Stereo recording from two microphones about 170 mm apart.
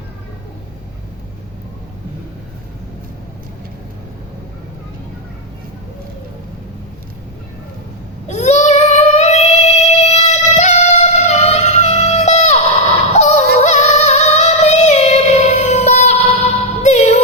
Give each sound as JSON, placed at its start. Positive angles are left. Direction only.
{"t": 8.3, "sound": "child singing", "side_deg": 40}
{"t": 13.1, "sound": "yodeling", "side_deg": 40}